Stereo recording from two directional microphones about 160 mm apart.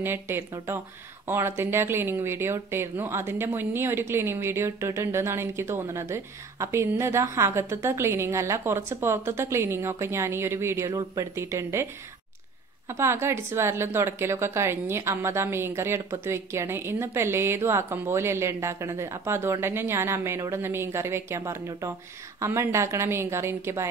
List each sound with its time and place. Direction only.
0.0 s speech: 15° right (ahead or behind)